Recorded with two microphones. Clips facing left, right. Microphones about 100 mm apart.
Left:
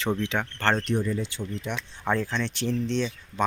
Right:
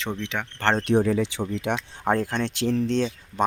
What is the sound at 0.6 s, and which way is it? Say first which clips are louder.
Speech: right 3 dB; 25° right (ahead or behind).